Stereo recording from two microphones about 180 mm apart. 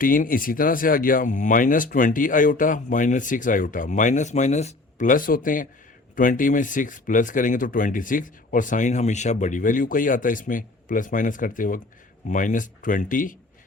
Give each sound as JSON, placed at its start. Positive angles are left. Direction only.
{"t": 0.0, "sound": "speech", "side_deg": 50}